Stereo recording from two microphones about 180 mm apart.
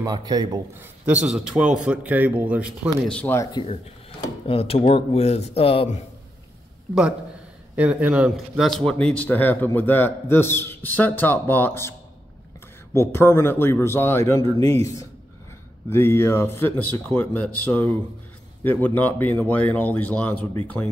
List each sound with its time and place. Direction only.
0.0 s speech: 20° right (ahead or behind)
0.7 s a man's voice: 5° right (ahead or behind)
3.1 s speech: 10° left (ahead or behind)
4.5 s speech: 30° left (ahead or behind)
7.7 s speech: 10° right (ahead or behind); by 11.9 s 10° left (ahead or behind)
12.9 s speech: 15° left (ahead or behind)
14.4 s a man's voice: 30° right (ahead or behind)
14.7 s speech: 20° left (ahead or behind)